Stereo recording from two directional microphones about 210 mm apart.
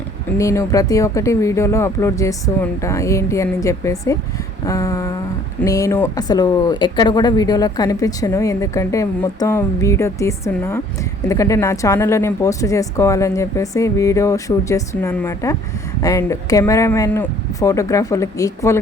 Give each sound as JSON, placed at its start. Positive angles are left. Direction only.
{"t": 0.3, "sound": "speech", "side_deg": 15}